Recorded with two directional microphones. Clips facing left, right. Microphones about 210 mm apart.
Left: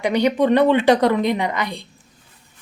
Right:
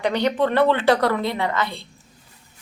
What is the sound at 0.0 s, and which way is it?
A woman's voice, 15° left (ahead or behind).